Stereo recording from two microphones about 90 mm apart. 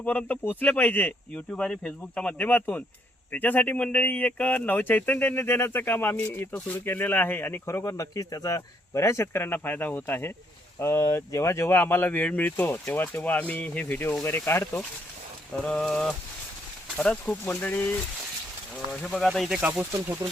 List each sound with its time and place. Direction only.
0.0 s speech: 20° left (ahead or behind)
15.6 s a sound: 5° left (ahead or behind)
17.4 s speech: 20° left (ahead or behind)
19.0 s speech: 5° left (ahead or behind)
19.5 s speech: 5° right (ahead or behind)
19.7 s speech: 25° right (ahead or behind)